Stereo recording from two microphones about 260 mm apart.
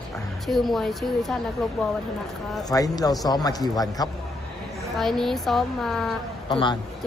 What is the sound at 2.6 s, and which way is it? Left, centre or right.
A man's voice, centre.